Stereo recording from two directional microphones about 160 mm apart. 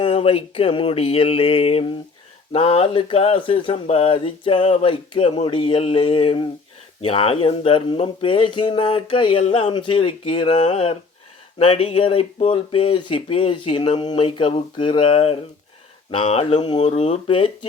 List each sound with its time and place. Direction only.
0.0 s speech: 35° left (ahead or behind)
16.8 s speech: 40° left (ahead or behind)